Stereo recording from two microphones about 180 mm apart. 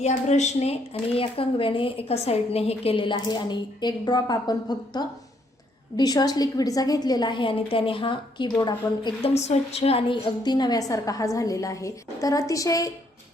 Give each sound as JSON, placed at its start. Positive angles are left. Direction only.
{"t": 0.0, "sound": "a woman's voice", "side_deg": 40}
{"t": 9.3, "sound": "a woman's voice", "side_deg": 35}